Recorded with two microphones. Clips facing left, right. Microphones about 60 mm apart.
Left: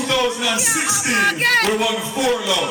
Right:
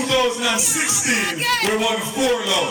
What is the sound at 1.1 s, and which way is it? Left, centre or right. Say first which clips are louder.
Music: left 7 dB; left.